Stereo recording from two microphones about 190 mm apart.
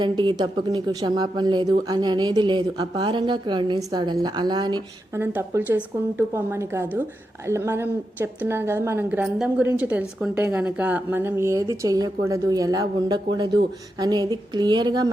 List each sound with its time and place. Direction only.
0.0 s a woman's voice: 20° right (ahead or behind)